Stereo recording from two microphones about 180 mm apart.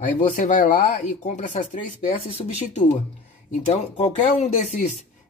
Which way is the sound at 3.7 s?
40° left (ahead or behind).